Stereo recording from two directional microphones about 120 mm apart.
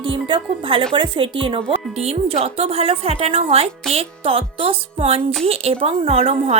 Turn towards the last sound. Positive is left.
turn(degrees=-60)  # may be behind; listen again after turning